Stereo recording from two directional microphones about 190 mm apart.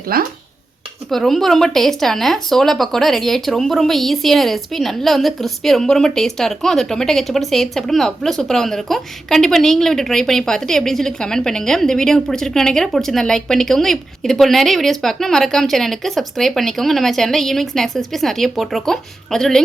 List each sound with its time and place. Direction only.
0.1 s dishes: 50° right (ahead or behind)
1.1 s speech: centre (ahead or behind)